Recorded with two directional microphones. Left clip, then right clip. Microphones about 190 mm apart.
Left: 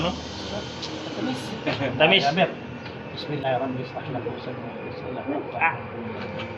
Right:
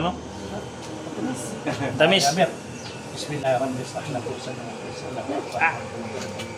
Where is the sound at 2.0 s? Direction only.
70° right (ahead or behind).